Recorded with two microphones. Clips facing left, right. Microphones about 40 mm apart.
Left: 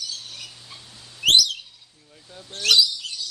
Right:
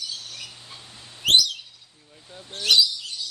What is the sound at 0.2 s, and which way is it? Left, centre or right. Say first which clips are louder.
Squawk: even; centre.